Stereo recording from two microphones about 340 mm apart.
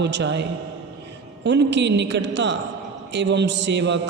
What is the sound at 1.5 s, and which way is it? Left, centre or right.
A man's voice, right.